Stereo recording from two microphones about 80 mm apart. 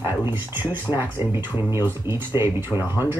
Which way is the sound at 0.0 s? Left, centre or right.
Right.